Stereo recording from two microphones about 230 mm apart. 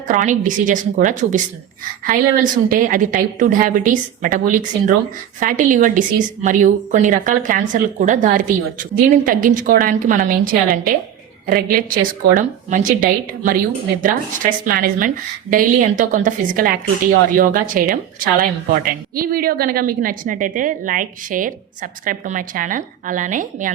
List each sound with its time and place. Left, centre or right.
0.1 s a woman's voice: right